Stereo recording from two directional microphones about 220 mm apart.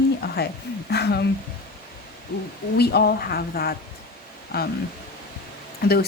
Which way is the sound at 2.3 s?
45° left (ahead or behind).